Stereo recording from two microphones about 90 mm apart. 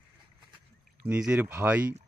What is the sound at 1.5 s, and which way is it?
Speech, 20° right (ahead or behind).